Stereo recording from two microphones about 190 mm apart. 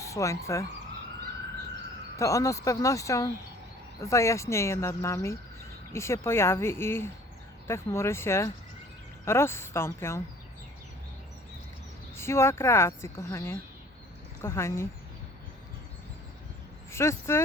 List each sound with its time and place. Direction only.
0.0 s speech: 15° left (ahead or behind)
2.1 s speech: 15° left (ahead or behind)
12.1 s speech: 15° left (ahead or behind)
16.9 s speech: 15° left (ahead or behind)